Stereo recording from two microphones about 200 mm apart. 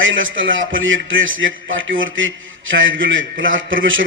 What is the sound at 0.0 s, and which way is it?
A man's voice, 75° right (ahead or behind).